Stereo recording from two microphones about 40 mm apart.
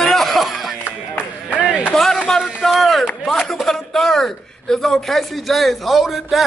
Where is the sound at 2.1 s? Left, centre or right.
Centre.